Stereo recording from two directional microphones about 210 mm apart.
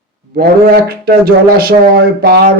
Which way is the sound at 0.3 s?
45° right (ahead or behind).